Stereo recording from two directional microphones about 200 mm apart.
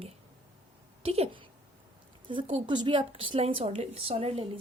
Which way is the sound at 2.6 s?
25° right (ahead or behind).